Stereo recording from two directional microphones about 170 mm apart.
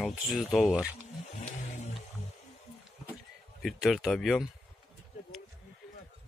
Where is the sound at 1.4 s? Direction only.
45° left (ahead or behind).